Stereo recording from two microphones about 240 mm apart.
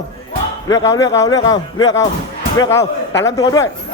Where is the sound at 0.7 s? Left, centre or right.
Centre.